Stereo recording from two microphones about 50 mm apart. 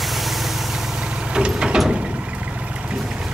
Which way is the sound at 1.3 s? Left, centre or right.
Centre.